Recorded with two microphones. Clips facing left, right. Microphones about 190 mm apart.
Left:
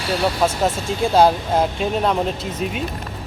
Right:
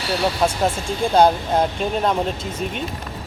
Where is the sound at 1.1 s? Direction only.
Centre (ahead or behind).